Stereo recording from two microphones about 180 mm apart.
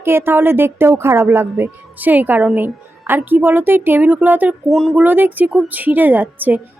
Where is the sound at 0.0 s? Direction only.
15° right (ahead or behind).